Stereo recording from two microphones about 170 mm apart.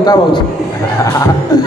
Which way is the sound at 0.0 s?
25° left (ahead or behind).